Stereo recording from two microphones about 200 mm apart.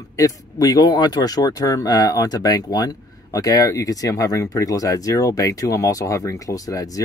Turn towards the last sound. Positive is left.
turn(degrees=15)  # may be behind; listen again after turning